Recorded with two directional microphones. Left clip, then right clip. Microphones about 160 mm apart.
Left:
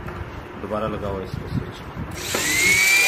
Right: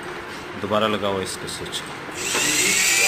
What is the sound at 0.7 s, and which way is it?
Speech, 10° right (ahead or behind).